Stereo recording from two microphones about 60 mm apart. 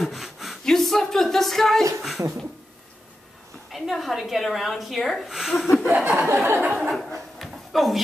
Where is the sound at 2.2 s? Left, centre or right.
Right.